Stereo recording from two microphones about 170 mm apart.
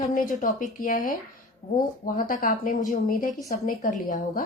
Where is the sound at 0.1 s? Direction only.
50° left (ahead or behind).